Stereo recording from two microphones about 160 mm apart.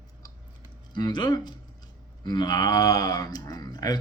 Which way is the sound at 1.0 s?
25° left (ahead or behind).